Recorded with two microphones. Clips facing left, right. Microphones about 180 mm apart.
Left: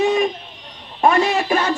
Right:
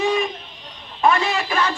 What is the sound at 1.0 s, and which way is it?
Speech, 45° left (ahead or behind).